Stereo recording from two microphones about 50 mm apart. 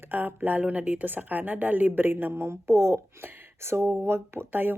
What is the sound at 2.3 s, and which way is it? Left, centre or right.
Speech, right.